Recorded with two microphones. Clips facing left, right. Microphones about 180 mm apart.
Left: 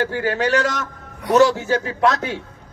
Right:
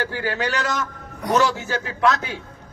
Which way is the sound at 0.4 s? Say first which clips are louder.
Left 6 dB; 35° left (ahead or behind).